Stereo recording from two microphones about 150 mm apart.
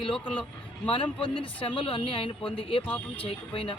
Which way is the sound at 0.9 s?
35° left (ahead or behind).